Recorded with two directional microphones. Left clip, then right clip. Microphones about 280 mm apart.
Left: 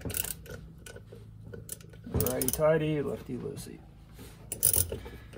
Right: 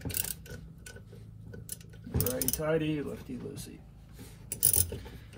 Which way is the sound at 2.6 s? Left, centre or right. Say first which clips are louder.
Left 7 dB; left.